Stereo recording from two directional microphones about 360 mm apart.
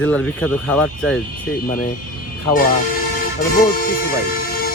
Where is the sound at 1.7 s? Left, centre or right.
Left.